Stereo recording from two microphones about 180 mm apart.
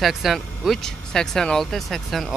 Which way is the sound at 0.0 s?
Centre (ahead or behind).